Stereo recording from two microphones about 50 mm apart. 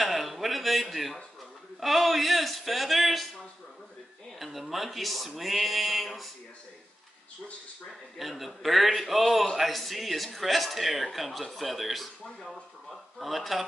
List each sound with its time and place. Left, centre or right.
0.0 s a sound: centre
1.8 s a man's voice: centre
4.4 s a man's voice: centre
8.2 s a man's voice: centre
13.2 s a man's voice: centre